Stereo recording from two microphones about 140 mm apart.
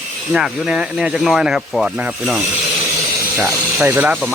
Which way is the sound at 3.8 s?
10° right (ahead or behind).